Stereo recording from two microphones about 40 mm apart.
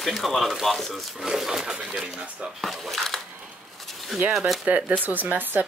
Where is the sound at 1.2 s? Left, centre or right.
Centre.